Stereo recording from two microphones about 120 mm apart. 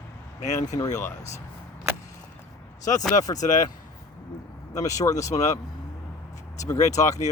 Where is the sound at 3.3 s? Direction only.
90° left.